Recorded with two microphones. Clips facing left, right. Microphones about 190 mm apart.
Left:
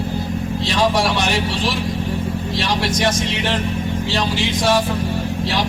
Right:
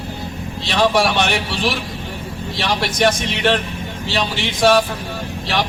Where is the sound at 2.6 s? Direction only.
70° right (ahead or behind).